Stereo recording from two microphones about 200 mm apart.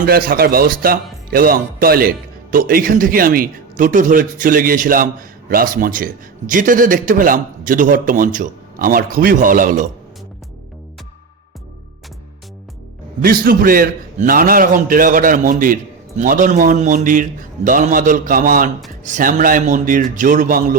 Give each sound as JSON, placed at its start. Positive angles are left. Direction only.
{"t": 0.0, "sound": "a man's voice", "side_deg": -45}
{"t": 13.2, "sound": "a man's voice", "side_deg": -45}